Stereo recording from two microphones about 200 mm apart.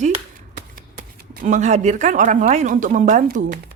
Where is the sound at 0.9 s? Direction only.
40° right (ahead or behind).